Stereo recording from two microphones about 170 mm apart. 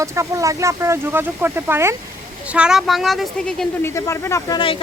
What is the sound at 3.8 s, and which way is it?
Speech, 15° left (ahead or behind).